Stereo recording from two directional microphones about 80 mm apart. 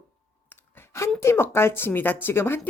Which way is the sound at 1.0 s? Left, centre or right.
Left.